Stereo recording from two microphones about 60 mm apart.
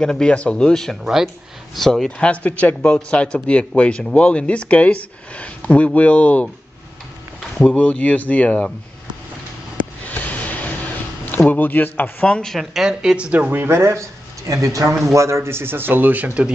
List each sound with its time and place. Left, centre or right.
0.0 s speech: centre
1.0 s a woman's voice: centre
1.8 s speech: centre
2.0 s speech: centre
7.6 s speech: left
10.0 s a sound: left
11.5 s speech: left
12.3 s speech: centre
12.5 s a woman's voice: centre
13.5 s speech: right
14.5 s a man's voice: right
15.1 s speech: right